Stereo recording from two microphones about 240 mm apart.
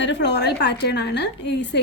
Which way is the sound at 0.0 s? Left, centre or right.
Left.